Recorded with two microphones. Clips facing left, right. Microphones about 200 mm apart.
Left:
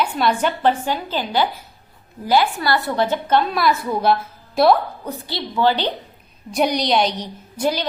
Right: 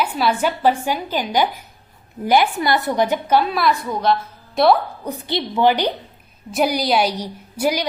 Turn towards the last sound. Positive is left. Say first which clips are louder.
# right 1 dB
turn(degrees=-10)  # may be behind; listen again after turning